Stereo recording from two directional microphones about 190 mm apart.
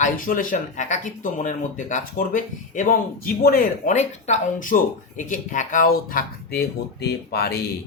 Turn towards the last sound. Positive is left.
turn(degrees=55)  # may be behind; listen again after turning